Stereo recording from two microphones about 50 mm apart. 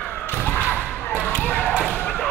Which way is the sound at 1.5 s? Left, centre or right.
Left.